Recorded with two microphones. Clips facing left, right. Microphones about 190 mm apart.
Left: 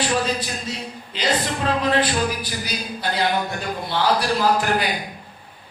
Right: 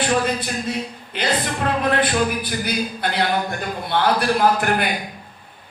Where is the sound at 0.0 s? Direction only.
55° right (ahead or behind).